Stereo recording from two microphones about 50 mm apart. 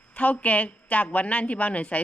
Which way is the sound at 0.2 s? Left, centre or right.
Left.